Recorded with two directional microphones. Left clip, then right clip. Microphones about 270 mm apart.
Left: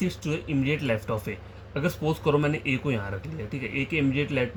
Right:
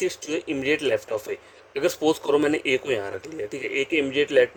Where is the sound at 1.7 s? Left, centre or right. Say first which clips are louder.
Right 6 dB; right.